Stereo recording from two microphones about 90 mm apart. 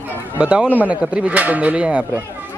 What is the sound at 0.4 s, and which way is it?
Speech, 10° right (ahead or behind).